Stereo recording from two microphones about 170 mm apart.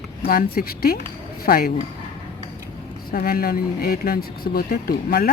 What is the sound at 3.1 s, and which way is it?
Speech, 60° left (ahead or behind).